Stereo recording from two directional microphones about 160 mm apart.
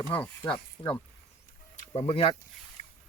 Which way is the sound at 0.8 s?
20° left (ahead or behind).